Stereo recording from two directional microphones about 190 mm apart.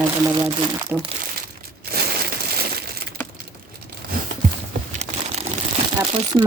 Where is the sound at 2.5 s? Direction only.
55° right (ahead or behind).